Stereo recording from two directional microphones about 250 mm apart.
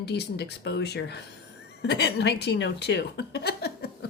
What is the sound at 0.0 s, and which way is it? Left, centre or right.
A woman's voice, left.